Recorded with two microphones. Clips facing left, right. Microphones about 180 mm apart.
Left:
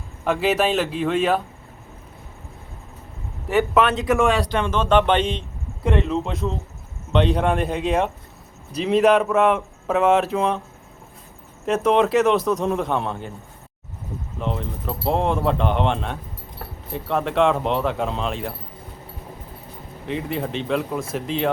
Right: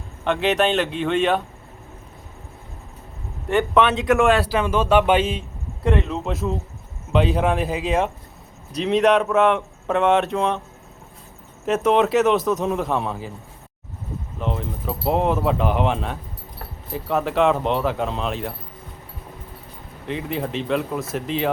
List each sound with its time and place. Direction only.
0.3 s speech: 5° left (ahead or behind)
3.5 s speech: centre (ahead or behind)
11.6 s speech: centre (ahead or behind)
14.3 s speech: centre (ahead or behind)
20.1 s speech: centre (ahead or behind)